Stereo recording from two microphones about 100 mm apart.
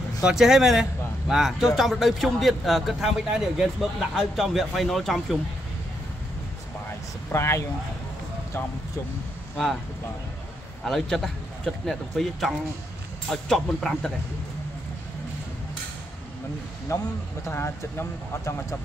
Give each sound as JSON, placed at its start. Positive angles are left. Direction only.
{"t": 0.2, "sound": "a man's voice", "side_deg": -5}
{"t": 7.3, "sound": "speech", "side_deg": 30}
{"t": 10.9, "sound": "a man's voice", "side_deg": 0}
{"t": 16.9, "sound": "speech", "side_deg": 30}